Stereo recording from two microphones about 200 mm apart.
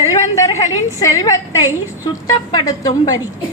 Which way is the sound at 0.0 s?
15° left (ahead or behind).